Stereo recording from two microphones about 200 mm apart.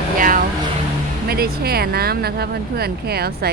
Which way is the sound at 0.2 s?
45° right (ahead or behind).